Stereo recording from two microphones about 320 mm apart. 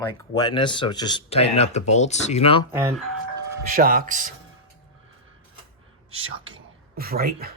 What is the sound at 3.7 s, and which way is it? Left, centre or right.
Speech, right.